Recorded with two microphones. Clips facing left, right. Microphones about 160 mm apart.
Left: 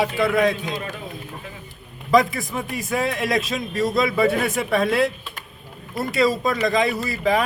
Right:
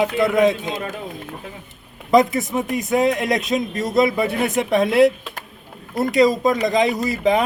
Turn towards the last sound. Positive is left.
turn(degrees=-20)  # may be behind; listen again after turning